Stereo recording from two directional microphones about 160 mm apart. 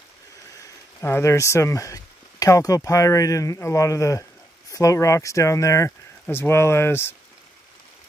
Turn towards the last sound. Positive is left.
turn(degrees=15)  # may be behind; listen again after turning